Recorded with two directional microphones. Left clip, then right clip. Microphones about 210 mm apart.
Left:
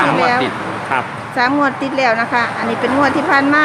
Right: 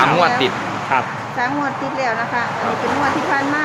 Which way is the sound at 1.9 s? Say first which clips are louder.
Left 6 dB; 50° left (ahead or behind).